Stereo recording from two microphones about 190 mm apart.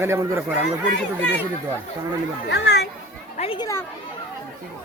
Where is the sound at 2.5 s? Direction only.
60° left (ahead or behind).